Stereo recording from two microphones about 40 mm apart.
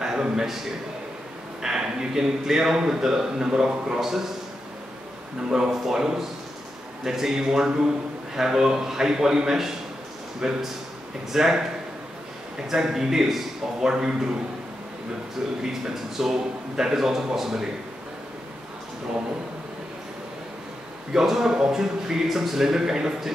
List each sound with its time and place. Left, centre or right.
0.0 s a sound: centre
1.6 s a man's voice: centre
5.5 s a man's voice: centre
12.6 s a man's voice: centre
15.6 s a man's voice: centre
21.1 s a man's voice: centre